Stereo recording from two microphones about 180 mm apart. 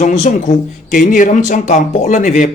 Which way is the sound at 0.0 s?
45° left (ahead or behind).